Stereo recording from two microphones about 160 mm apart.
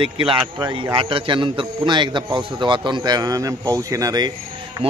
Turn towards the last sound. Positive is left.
turn(degrees=-25)  # may be behind; listen again after turning